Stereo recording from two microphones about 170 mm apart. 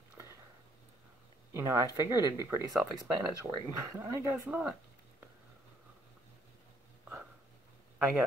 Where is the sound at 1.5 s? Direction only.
20° right (ahead or behind).